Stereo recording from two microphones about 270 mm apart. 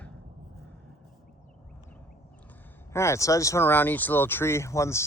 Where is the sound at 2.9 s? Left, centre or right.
Centre.